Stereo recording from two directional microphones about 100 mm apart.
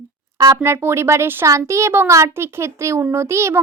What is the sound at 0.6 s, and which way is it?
A child's voice, 25° right (ahead or behind).